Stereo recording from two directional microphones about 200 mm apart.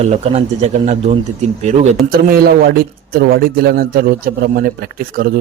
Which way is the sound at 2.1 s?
50° right (ahead or behind).